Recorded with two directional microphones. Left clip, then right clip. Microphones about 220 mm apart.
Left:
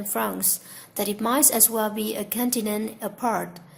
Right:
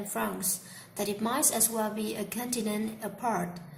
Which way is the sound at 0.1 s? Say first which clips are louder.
Left 7 dB; 50° left (ahead or behind).